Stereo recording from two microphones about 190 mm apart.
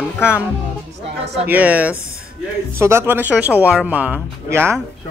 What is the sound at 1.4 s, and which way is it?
Speech, 10° right (ahead or behind).